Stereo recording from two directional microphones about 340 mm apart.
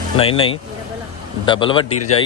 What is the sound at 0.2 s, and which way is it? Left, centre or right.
A man's voice, centre.